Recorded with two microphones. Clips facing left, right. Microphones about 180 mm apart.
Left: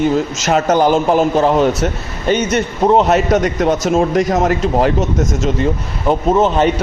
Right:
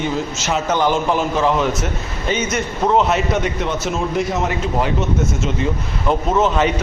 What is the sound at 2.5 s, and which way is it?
A man's voice, 40° left (ahead or behind).